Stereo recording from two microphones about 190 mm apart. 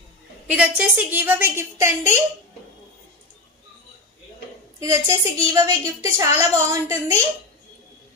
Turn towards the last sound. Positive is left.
turn(degrees=-15)  # may be behind; listen again after turning